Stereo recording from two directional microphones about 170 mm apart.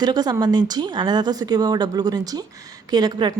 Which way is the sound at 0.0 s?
25° right (ahead or behind).